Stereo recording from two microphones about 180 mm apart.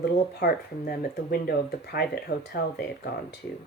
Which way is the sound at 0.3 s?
60° left (ahead or behind).